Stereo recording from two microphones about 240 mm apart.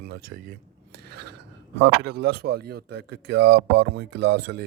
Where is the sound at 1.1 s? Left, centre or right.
Right.